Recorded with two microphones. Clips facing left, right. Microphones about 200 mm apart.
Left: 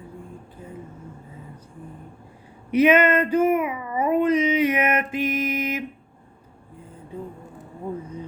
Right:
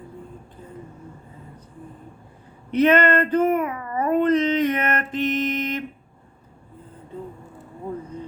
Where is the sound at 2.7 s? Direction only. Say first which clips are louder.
Even; 10° left (ahead or behind).